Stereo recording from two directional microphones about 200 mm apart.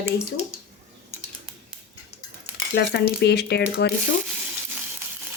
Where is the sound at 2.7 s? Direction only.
55° left (ahead or behind).